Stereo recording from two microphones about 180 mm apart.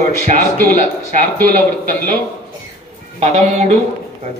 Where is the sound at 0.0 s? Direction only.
45° right (ahead or behind).